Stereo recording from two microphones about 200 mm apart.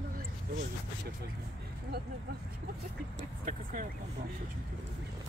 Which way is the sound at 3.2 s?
40° right (ahead or behind).